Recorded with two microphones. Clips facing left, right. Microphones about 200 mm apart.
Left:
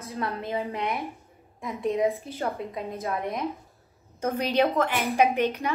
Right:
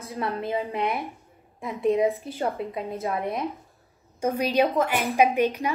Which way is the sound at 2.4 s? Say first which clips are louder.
Right 2 dB; 15° right (ahead or behind).